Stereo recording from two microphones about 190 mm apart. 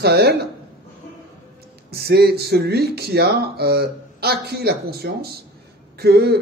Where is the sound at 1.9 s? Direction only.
55° right (ahead or behind).